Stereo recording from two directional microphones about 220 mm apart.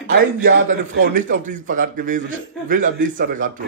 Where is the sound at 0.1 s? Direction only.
40° right (ahead or behind).